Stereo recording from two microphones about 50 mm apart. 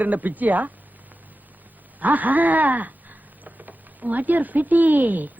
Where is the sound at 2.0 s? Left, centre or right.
Right.